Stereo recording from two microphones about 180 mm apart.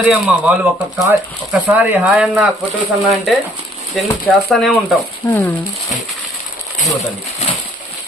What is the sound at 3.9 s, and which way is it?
Speech, centre (ahead or behind).